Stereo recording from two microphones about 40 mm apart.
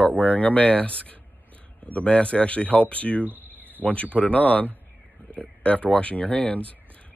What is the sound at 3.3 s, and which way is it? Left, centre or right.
Cricket, right.